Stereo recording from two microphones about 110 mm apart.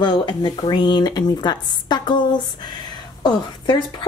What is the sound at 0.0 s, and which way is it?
A woman's voice, 45° left (ahead or behind).